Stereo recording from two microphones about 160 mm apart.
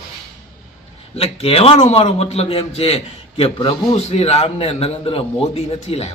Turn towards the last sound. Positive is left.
turn(degrees=40)  # may be behind; listen again after turning